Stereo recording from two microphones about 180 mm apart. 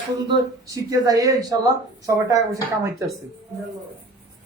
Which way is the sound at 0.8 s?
20° right (ahead or behind).